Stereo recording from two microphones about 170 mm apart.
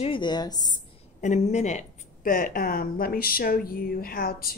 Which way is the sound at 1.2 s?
45° left (ahead or behind).